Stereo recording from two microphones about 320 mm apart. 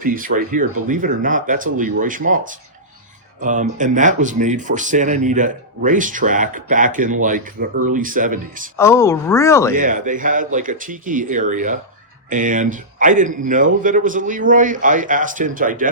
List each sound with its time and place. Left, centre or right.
0.0 s speech: right
8.7 s speech: centre
9.7 s speech: right